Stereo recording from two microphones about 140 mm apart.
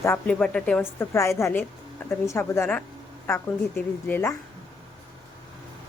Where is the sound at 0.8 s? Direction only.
20° left (ahead or behind).